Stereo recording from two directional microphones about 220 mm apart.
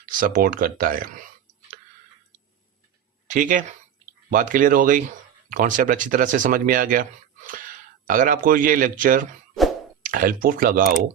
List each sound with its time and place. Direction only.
0.0 s speech: 40° right (ahead or behind)
3.2 s speech: 35° right (ahead or behind)